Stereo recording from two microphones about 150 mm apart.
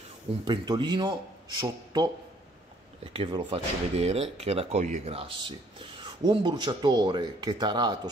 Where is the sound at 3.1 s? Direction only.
40° right (ahead or behind).